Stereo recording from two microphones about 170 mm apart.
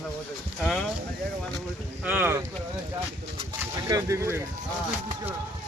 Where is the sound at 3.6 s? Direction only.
20° right (ahead or behind).